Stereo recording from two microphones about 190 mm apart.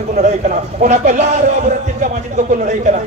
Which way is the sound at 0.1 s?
40° right (ahead or behind).